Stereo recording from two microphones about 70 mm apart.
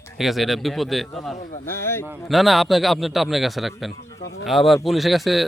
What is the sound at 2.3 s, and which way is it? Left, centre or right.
A man's voice, centre.